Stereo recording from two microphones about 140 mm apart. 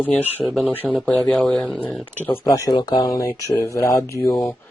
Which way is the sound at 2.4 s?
25° left (ahead or behind).